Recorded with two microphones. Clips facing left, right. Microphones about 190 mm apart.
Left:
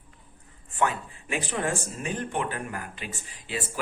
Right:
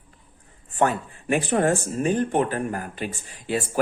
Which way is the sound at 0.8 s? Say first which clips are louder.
Right 5 dB; 50° right (ahead or behind).